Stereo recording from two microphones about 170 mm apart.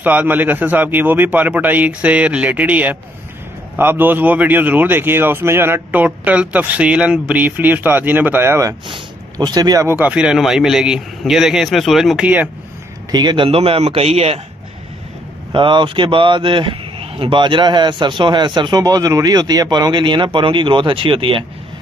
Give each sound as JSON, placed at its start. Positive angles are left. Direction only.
{"t": 0.0, "sound": "a man's voice", "side_deg": -10}
{"t": 8.8, "sound": "speech", "side_deg": -25}
{"t": 13.1, "sound": "a man's voice", "side_deg": -25}
{"t": 15.5, "sound": "a man's voice", "side_deg": -30}